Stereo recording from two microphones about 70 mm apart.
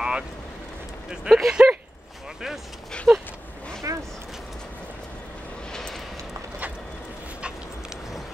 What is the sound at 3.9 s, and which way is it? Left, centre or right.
Vehicle, right.